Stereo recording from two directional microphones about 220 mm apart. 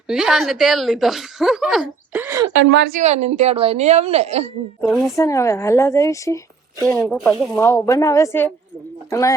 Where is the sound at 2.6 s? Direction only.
50° right (ahead or behind).